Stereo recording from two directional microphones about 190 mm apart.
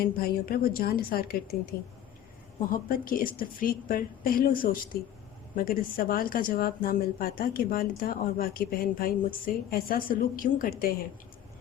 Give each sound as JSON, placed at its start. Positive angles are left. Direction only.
{"t": 0.0, "sound": "a woman's voice", "side_deg": 50}
{"t": 2.6, "sound": "a woman's voice", "side_deg": 50}